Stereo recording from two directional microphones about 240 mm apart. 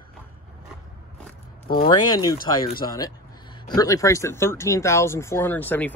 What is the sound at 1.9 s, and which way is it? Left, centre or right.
Speech, centre.